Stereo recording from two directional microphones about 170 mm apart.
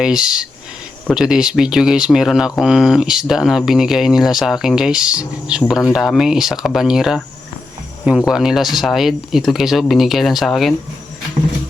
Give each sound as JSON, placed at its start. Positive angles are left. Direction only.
{"t": 0.0, "sound": "speech", "side_deg": -5}